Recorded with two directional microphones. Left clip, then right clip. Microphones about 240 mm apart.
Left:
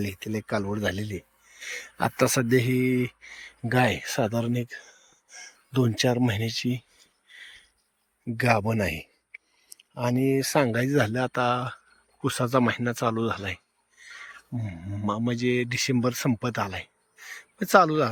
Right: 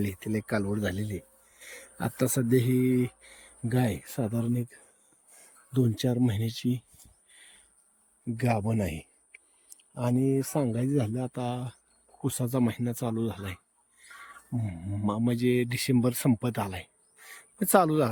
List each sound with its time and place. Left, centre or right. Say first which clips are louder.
0.0 s speech: left 1 dB; centre
4.5 s a sound: left 4 dB; centre
5.7 s speech: left 5 dB; centre
7.3 s a sound: left 11 dB; centre
10.3 s speech: left 6 dB; left
10.6 s speech: left 6 dB; centre